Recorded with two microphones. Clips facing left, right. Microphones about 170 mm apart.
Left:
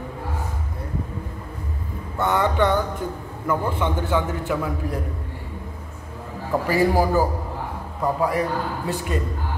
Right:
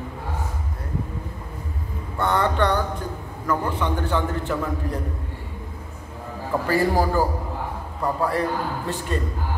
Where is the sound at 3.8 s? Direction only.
15° left (ahead or behind).